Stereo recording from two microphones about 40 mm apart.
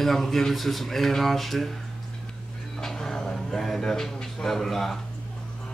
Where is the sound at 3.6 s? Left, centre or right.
Centre.